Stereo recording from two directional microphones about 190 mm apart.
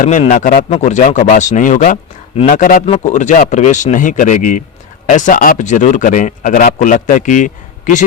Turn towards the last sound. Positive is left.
turn(degrees=40)  # may be behind; listen again after turning